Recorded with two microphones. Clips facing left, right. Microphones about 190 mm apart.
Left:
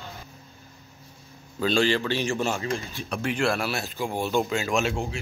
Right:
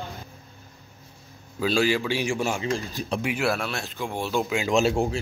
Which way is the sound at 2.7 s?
40° right (ahead or behind).